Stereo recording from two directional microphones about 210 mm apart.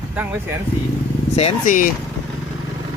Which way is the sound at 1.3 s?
35° left (ahead or behind).